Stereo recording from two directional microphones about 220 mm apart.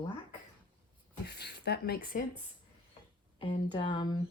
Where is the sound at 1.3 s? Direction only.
50° left (ahead or behind).